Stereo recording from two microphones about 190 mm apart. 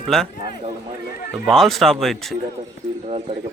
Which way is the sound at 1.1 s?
45° left (ahead or behind).